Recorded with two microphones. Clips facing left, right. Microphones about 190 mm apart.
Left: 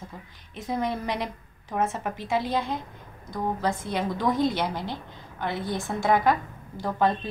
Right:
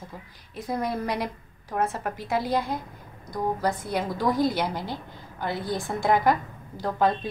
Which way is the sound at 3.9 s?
10° right (ahead or behind).